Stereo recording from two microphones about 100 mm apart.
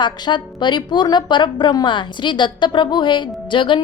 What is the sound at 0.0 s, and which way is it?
A woman's voice, 50° left (ahead or behind).